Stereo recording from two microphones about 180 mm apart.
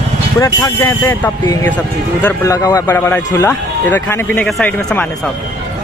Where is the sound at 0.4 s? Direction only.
20° left (ahead or behind).